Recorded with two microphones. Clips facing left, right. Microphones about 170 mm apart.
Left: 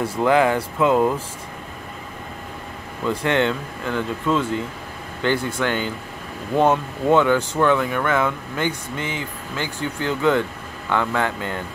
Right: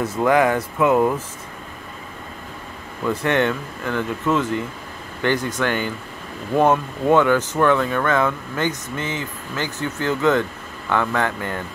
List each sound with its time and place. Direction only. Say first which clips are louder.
0.2 s speech: even; 25° left (ahead or behind)
3.1 s speech: even; 15° left (ahead or behind)
6.5 s speech: right 1 dB; 15° right (ahead or behind)
7.2 s speech: right 1 dB; 15° left (ahead or behind)